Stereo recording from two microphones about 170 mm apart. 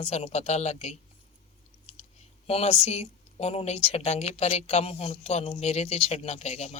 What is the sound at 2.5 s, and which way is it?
Speech, 35° left (ahead or behind).